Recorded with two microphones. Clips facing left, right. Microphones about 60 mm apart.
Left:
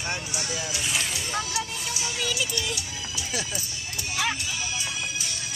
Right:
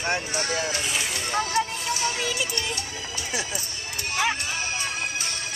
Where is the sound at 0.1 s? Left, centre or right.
Right.